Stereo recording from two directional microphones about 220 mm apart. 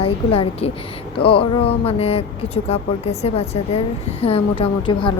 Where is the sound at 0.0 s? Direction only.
25° left (ahead or behind).